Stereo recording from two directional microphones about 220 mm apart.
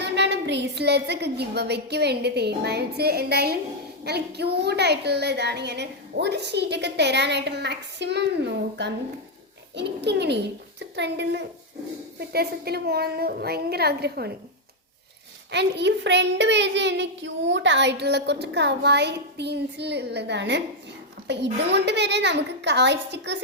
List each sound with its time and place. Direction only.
0.0 s a woman's voice: 50° right (ahead or behind)
15.5 s a woman's voice: 50° right (ahead or behind)